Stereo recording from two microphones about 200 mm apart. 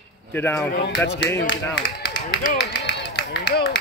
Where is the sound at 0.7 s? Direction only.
60° left (ahead or behind).